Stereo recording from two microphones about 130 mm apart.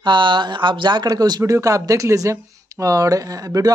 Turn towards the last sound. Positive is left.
turn(degrees=-25)  # may be behind; listen again after turning